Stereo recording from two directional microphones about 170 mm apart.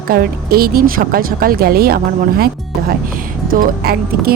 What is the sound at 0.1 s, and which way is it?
Speech, 60° right (ahead or behind).